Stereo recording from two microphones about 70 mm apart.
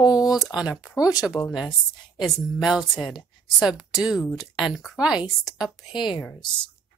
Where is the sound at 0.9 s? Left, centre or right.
Left.